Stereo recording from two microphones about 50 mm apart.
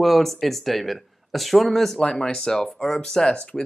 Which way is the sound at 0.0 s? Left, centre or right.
Centre.